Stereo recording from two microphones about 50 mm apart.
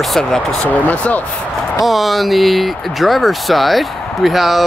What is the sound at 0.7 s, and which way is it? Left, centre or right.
Speech, left.